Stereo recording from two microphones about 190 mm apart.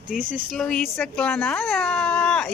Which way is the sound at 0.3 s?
Centre (ahead or behind).